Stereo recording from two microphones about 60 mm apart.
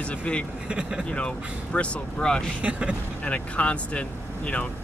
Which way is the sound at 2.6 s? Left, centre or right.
Centre.